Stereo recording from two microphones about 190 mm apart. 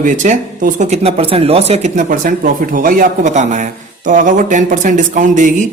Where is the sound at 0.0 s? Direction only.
40° right (ahead or behind).